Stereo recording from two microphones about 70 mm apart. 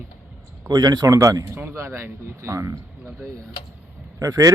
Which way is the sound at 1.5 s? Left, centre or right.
Right.